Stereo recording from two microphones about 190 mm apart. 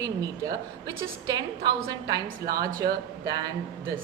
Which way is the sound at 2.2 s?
50° right (ahead or behind).